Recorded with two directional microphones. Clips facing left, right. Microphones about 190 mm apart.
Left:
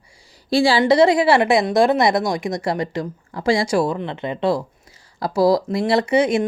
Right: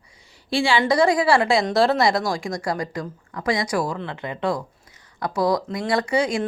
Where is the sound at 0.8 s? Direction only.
25° left (ahead or behind).